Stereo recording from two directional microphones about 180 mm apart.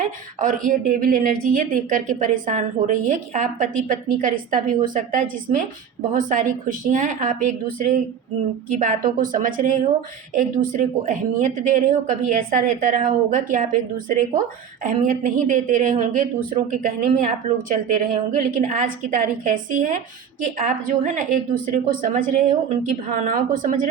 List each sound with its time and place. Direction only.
0.3 s speech: 45° right (ahead or behind)
14.8 s speech: 50° right (ahead or behind)